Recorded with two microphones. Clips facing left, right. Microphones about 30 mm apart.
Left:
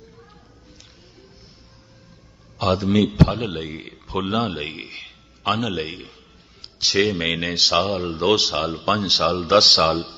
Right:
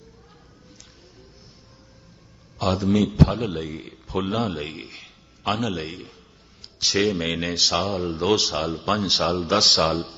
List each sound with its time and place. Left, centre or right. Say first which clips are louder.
2.6 s a man's voice: left 2 dB; left
5.5 s a man's voice: left 2 dB; centre
6.6 s a sound: left 2 dB; left
7.2 s a man's voice: left 3 dB; left
7.9 s a man's voice: left 2 dB; left
8.1 s speech: left 3 dB; centre
9.3 s a man's voice: left 6 dB; left